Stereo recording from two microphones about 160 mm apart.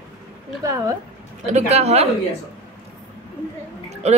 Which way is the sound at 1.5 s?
45° right (ahead or behind).